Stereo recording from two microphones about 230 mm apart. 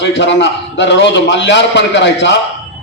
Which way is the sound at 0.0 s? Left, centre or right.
Left.